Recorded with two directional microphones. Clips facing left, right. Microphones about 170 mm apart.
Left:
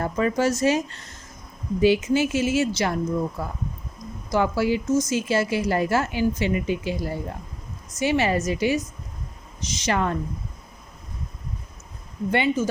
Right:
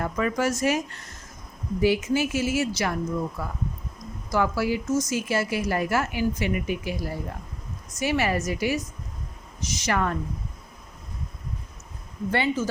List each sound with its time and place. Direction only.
0.0 s a woman's voice: 30° left (ahead or behind)